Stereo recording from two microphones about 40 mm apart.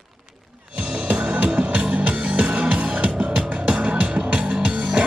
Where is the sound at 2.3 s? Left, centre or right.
Right.